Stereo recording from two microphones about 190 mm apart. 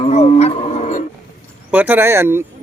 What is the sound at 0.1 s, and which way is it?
Livestock, 35° left (ahead or behind).